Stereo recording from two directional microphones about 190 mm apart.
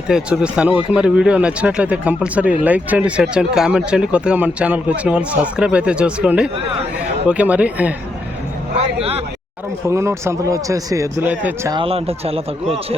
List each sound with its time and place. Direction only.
0.1 s speech: 5° right (ahead or behind)
9.0 s speech: 30° right (ahead or behind)
9.8 s speech: 15° right (ahead or behind)
11.7 s speech: 30° right (ahead or behind)